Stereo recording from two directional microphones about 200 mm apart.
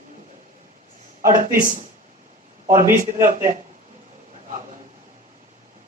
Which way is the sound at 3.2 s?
40° right (ahead or behind).